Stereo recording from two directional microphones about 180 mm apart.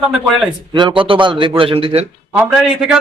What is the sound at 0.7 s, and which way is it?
A man's voice, 25° right (ahead or behind).